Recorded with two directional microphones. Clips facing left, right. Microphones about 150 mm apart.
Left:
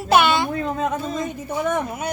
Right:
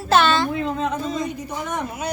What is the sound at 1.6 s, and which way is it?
Speech, 55° left (ahead or behind).